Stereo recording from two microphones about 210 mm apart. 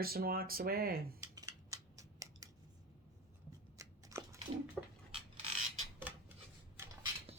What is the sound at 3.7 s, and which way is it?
Biting, 15° right (ahead or behind).